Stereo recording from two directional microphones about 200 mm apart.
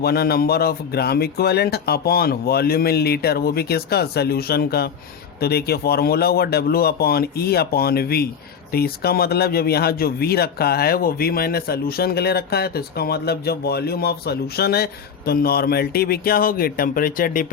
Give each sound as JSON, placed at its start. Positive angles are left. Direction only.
{"t": 0.0, "sound": "speech", "side_deg": 50}